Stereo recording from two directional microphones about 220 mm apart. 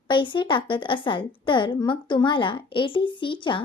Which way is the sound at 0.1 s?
20° left (ahead or behind).